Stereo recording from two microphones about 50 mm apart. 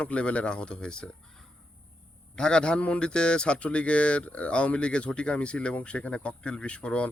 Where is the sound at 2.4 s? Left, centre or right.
Centre.